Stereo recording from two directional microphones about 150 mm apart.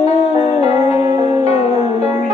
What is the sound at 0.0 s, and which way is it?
Music, 45° left (ahead or behind).